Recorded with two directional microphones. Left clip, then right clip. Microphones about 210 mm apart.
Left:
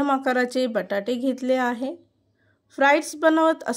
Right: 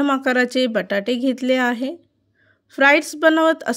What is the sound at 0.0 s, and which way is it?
Speech, 40° right (ahead or behind).